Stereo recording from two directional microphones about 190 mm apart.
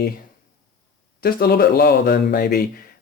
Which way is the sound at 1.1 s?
55° left (ahead or behind).